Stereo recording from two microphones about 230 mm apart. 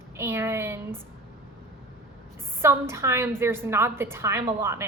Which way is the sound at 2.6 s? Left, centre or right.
Centre.